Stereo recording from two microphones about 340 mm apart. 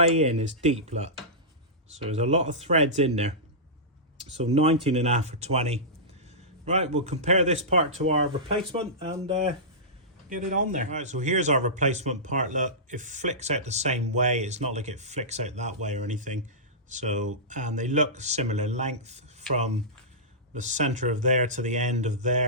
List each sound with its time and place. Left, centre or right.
0.1 s speech: centre
4.4 s speech: centre